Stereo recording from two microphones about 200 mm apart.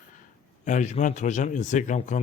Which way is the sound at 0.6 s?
35° left (ahead or behind).